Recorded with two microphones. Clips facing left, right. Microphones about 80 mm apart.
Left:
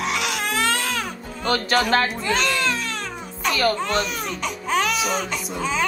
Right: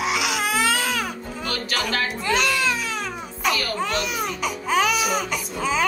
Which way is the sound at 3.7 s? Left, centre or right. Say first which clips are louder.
Left 1 dB; centre.